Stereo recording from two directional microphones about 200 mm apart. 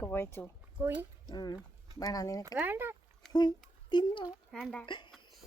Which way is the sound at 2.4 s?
10° right (ahead or behind).